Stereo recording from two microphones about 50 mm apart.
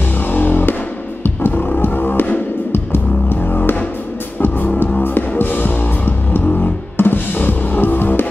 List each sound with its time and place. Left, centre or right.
0.3 s music: left